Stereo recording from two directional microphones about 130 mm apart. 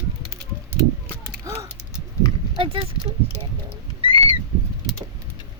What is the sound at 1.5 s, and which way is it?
Clip-clop, 25° right (ahead or behind).